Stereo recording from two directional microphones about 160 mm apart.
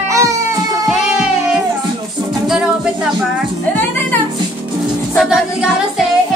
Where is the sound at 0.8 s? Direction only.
5° right (ahead or behind).